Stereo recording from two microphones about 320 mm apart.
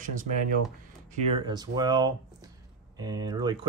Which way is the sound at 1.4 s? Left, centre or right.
Centre.